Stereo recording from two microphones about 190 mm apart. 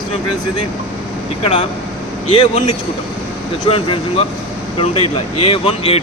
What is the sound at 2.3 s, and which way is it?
Speech, 30° left (ahead or behind).